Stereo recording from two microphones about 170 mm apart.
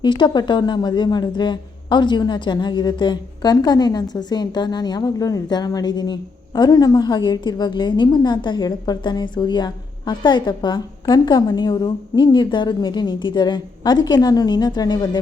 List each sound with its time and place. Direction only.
0.0 s a woman's voice: 25° left (ahead or behind)